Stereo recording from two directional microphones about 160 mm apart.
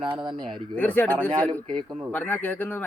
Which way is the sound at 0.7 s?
10° left (ahead or behind).